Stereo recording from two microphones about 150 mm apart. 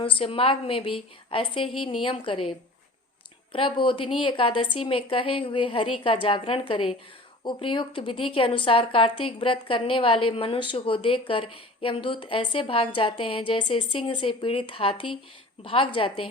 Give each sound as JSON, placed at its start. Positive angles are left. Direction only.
{"t": 0.0, "sound": "speech", "side_deg": 35}
{"t": 3.5, "sound": "speech", "side_deg": 35}